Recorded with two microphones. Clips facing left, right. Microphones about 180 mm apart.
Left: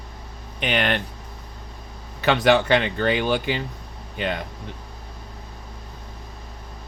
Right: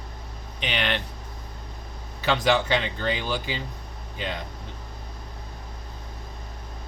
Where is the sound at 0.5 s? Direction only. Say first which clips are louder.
Left 5 dB; 50° left (ahead or behind).